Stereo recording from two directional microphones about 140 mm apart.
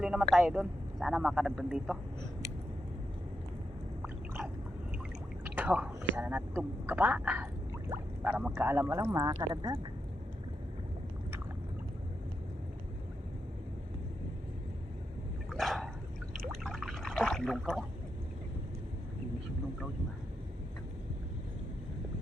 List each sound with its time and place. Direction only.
0.0 s a man's voice: 5° right (ahead or behind)
5.5 s speech: 10° right (ahead or behind); by 9.7 s 30° right (ahead or behind)
15.4 s a sound: centre (ahead or behind)